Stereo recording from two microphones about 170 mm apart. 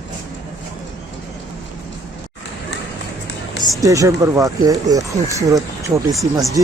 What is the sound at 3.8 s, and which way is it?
Speech, 20° right (ahead or behind).